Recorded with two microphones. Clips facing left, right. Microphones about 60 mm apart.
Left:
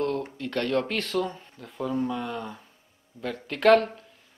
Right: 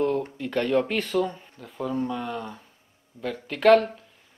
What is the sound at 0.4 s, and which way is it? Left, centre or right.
Speech, centre.